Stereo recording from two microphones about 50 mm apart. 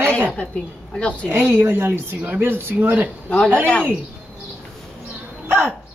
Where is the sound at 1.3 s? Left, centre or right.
Right.